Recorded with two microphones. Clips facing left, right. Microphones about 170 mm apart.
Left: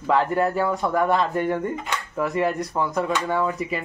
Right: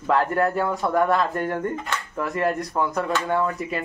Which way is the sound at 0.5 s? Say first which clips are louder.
Even; centre (ahead or behind).